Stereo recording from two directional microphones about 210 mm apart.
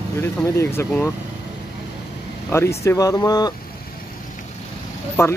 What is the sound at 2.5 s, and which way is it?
Speech, 15° left (ahead or behind).